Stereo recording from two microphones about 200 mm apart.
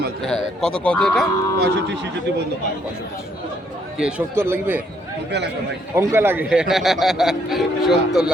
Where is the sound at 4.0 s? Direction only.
5° right (ahead or behind).